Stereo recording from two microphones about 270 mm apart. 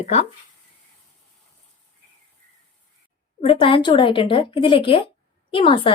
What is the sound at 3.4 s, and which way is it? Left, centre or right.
Speech, left.